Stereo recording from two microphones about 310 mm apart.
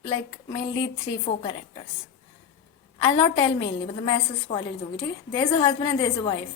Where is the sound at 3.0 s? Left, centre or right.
Centre.